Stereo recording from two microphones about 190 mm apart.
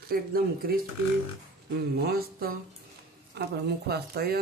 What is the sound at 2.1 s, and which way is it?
Speech, 50° right (ahead or behind).